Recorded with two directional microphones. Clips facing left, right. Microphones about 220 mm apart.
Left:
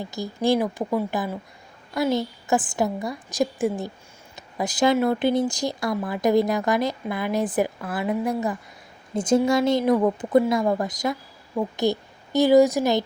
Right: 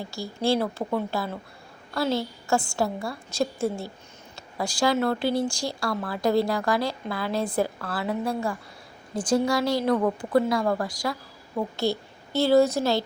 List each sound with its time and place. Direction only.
0.0 s a woman's voice: 20° left (ahead or behind)